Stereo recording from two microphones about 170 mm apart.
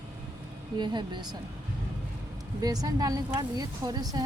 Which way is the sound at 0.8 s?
25° right (ahead or behind).